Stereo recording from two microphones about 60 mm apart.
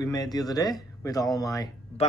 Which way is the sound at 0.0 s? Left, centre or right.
Left.